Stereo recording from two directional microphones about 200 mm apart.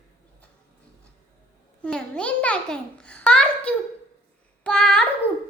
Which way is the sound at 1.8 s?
5° left (ahead or behind).